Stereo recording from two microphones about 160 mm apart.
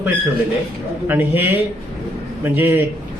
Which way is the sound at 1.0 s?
15° right (ahead or behind).